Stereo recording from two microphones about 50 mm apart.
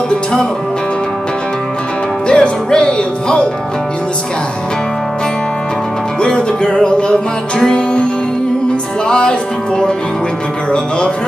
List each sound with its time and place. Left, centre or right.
2.2 s speech: centre
6.2 s music: centre